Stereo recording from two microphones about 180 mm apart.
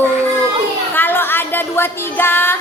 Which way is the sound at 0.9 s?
10° left (ahead or behind).